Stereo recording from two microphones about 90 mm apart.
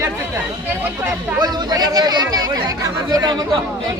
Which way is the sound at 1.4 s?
50° right (ahead or behind).